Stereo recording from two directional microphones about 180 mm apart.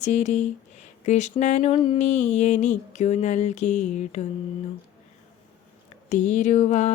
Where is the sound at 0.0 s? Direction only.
40° left (ahead or behind).